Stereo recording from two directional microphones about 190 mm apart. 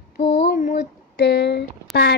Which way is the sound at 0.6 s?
45° left (ahead or behind).